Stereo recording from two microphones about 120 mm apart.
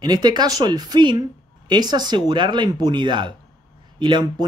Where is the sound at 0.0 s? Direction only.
35° right (ahead or behind).